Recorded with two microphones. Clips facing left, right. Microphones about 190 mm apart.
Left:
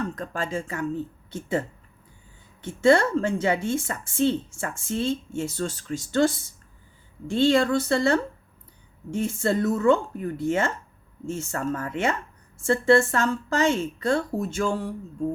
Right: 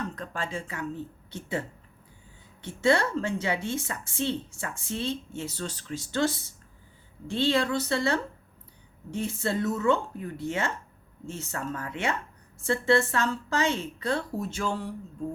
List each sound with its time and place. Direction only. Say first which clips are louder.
0.2 s a woman's voice: left 5 dB; 45° left (ahead or behind)